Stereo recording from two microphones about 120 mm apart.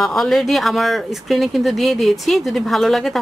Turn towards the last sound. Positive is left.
turn(degrees=0)  # may be behind; listen again after turning